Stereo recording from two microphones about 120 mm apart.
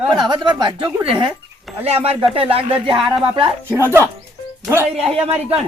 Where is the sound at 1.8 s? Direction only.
55° right (ahead or behind).